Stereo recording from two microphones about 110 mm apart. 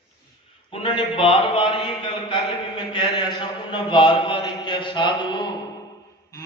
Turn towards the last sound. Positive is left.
turn(degrees=45)  # may be behind; listen again after turning